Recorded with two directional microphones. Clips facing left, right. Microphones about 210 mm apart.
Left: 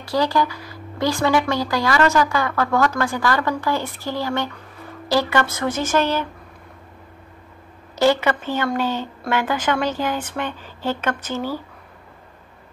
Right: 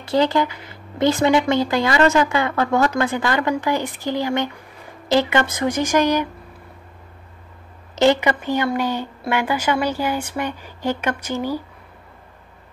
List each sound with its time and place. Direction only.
0.0 s speech: 25° right (ahead or behind)
7.9 s speech: 20° right (ahead or behind)